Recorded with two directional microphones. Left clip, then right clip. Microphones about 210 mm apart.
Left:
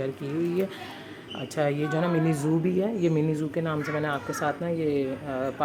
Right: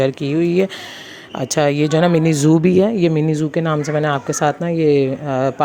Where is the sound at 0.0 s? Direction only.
35° right (ahead or behind).